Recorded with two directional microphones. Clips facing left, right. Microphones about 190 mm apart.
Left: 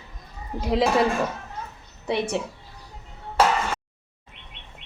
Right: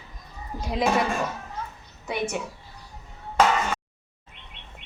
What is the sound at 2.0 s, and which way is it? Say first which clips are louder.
Speech: left 3 dB; 30° left (ahead or behind).